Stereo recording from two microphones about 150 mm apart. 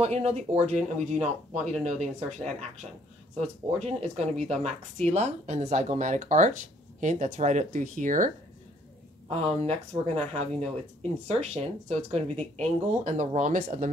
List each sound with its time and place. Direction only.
0.0 s speech: 45° right (ahead or behind)
9.3 s speech: 45° right (ahead or behind)